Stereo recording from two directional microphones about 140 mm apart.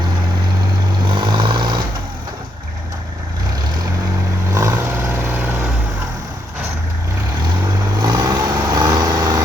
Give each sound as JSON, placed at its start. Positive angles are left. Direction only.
{"t": 1.0, "sound": "vehicle", "side_deg": -30}
{"t": 4.5, "sound": "vehicle", "side_deg": -20}
{"t": 7.6, "sound": "vehicle", "side_deg": -25}